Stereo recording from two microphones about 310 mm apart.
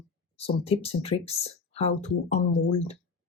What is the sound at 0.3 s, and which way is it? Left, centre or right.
Speech, centre.